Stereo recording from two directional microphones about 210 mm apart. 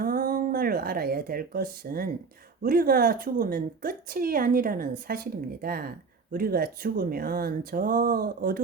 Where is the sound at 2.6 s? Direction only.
45° right (ahead or behind).